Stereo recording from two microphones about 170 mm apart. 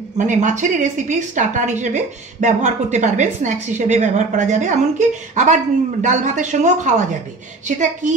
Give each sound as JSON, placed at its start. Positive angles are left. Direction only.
{"t": 0.2, "sound": "a woman's voice", "side_deg": -45}